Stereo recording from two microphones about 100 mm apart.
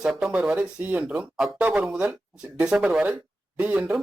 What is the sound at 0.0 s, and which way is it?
Speech, 5° right (ahead or behind).